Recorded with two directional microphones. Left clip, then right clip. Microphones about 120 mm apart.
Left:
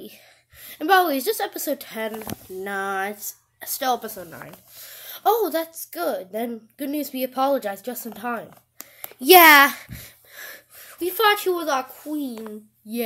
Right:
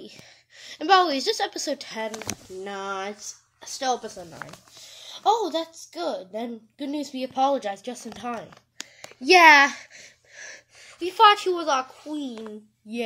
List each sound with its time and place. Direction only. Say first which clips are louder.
0.0 s a woman's voice: left 1 dB; 15° left (ahead or behind)
2.3 s speech: right 1 dB; 15° right (ahead or behind)
2.6 s speech: left 5 dB; 15° left (ahead or behind)
4.3 s speech: even; 35° left (ahead or behind)
9.2 s a child's voice: left 2 dB; 50° left (ahead or behind)
10.8 s a child's voice: right 4 dB; 25° left (ahead or behind)